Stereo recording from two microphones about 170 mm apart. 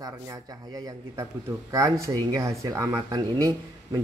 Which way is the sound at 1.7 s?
20° right (ahead or behind).